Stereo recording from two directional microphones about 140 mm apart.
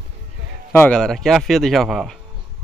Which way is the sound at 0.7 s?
15° left (ahead or behind).